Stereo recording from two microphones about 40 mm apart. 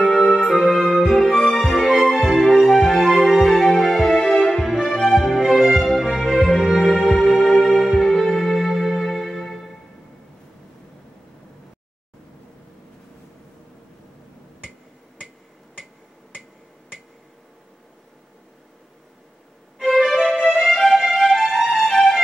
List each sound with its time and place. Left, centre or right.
0.1 s music: centre
7.0 s music: centre
19.8 s music: centre